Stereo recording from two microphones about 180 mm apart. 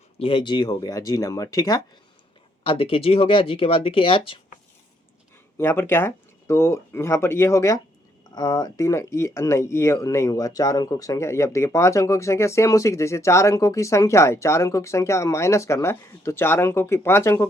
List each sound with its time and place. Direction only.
0.2 s speech: 30° left (ahead or behind)
2.6 s speech: 30° left (ahead or behind)
5.5 s speech: 15° left (ahead or behind)